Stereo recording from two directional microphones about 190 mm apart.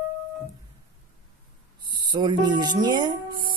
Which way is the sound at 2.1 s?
25° right (ahead or behind).